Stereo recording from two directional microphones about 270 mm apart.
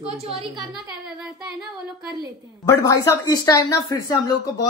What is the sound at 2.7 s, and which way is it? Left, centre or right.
Speech, centre.